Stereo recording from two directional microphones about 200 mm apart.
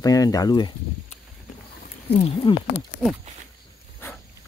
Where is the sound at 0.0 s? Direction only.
15° left (ahead or behind).